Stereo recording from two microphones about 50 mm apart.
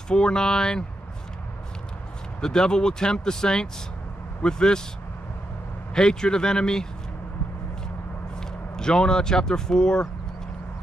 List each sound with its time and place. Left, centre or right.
0.1 s speech: centre
2.4 s speech: centre
5.9 s speech: centre
8.4 s speech: centre